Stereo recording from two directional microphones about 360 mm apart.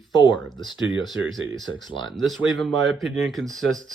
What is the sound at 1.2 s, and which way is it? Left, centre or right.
Speech, right.